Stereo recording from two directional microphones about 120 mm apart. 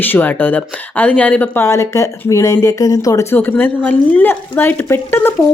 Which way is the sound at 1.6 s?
25° left (ahead or behind).